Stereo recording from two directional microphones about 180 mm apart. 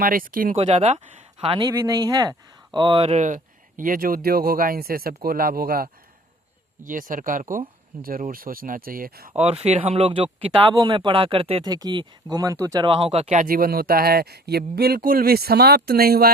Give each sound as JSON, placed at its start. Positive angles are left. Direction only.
{"t": 0.0, "sound": "speech", "side_deg": -50}
{"t": 0.5, "sound": "speech", "side_deg": -35}
{"t": 1.6, "sound": "speech", "side_deg": -15}
{"t": 9.4, "sound": "speech", "side_deg": -35}
{"t": 13.5, "sound": "speech", "side_deg": -55}